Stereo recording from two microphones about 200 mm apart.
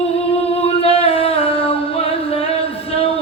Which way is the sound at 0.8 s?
30° left (ahead or behind).